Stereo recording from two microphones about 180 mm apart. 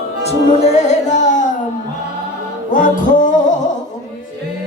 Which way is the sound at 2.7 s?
45° left (ahead or behind).